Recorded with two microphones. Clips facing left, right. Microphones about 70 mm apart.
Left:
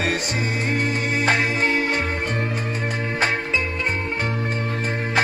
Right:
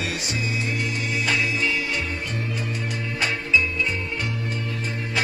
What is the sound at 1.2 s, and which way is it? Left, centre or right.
Music, left.